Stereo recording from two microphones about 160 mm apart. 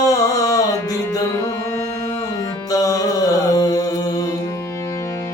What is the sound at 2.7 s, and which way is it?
Music, 20° left (ahead or behind).